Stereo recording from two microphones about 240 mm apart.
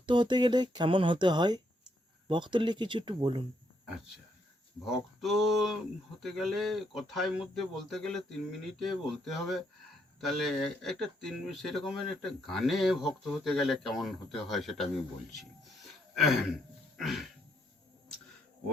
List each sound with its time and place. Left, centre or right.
0.0 s speech: centre
4.9 s speech: centre
17.0 s speech: centre